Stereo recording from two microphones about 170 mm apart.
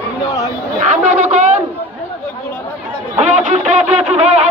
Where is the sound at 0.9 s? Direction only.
45° right (ahead or behind).